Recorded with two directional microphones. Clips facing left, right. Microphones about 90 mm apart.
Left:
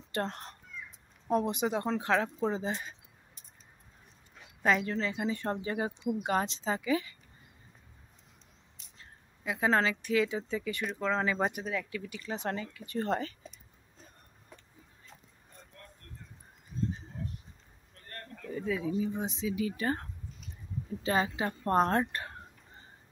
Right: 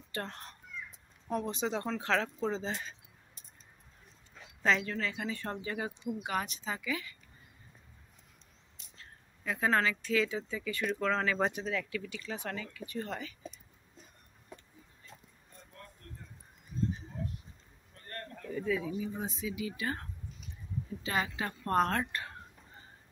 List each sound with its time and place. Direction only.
0.2 s speech: 30° left (ahead or behind)
4.6 s speech: 20° left (ahead or behind)
8.9 s a sound: 20° left (ahead or behind)
9.7 s speech: 25° left (ahead or behind); by 11.9 s 10° left (ahead or behind)
11.9 s speech: 25° left (ahead or behind)
18.5 s speech: 25° left (ahead or behind)
19.5 s speech: 40° left (ahead or behind)